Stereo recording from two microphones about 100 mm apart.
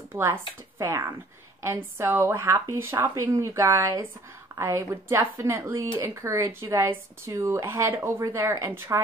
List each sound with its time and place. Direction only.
0.1 s speech: 25° right (ahead or behind)